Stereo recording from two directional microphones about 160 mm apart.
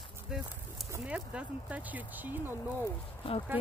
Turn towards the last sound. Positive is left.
turn(degrees=35)  # may be behind; listen again after turning